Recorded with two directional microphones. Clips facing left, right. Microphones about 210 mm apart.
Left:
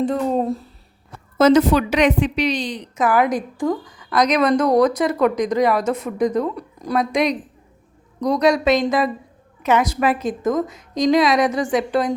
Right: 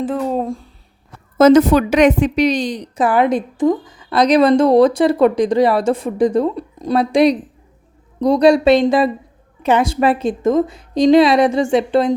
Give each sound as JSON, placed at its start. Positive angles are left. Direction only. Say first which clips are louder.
{"t": 0.0, "sound": "speech", "louder": "even", "side_deg": 0}
{"t": 1.4, "sound": "a woman's voice", "louder": "right 4 dB", "side_deg": -45}